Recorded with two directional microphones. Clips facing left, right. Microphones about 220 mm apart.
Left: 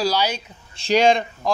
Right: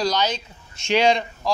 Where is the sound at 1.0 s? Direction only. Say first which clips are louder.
Left 2 dB; 50° left (ahead or behind).